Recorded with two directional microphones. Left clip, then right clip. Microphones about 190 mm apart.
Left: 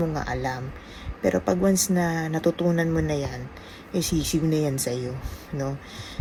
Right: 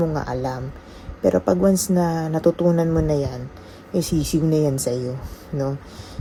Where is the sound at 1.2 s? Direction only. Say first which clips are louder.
Right 5 dB; 10° right (ahead or behind).